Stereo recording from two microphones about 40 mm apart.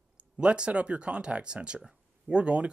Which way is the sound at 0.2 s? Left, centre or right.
Right.